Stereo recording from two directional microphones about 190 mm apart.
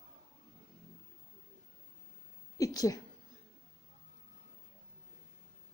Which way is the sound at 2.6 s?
20° left (ahead or behind).